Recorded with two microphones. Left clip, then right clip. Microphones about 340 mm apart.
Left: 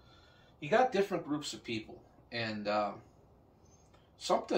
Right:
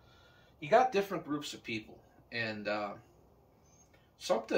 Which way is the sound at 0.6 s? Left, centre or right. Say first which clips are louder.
Right 2 dB; centre.